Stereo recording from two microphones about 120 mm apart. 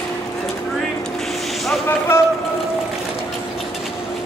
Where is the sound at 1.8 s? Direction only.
20° left (ahead or behind).